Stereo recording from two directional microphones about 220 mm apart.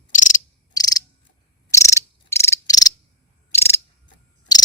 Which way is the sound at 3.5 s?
10° left (ahead or behind).